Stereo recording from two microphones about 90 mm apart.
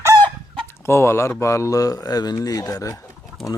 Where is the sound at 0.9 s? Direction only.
30° left (ahead or behind).